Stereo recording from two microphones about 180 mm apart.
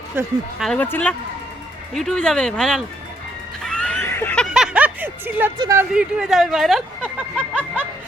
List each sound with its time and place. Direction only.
0.2 s speech: 15° right (ahead or behind)
0.6 s speech: 5° left (ahead or behind)
3.6 s a sound: 5° left (ahead or behind)
4.5 s music: 5° right (ahead or behind)
5.5 s speech: 20° right (ahead or behind)
5.9 s speech: 5° right (ahead or behind)